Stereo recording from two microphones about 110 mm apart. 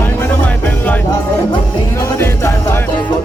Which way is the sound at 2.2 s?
25° left (ahead or behind).